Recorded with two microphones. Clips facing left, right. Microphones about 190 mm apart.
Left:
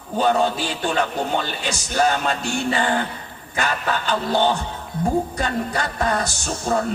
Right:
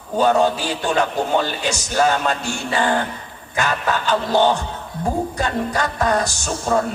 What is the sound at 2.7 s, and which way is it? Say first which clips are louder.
A man's voice: right 2 dB; 40° right (ahead or behind).